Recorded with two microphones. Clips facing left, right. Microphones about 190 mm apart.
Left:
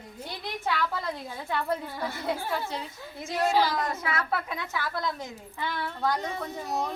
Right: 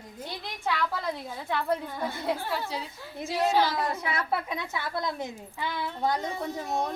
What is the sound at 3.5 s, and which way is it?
A woman's voice, 15° right (ahead or behind).